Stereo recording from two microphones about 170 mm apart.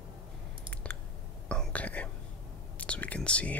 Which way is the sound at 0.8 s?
10° left (ahead or behind).